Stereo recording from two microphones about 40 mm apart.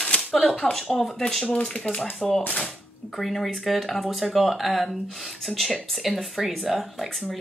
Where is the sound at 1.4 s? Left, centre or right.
Left.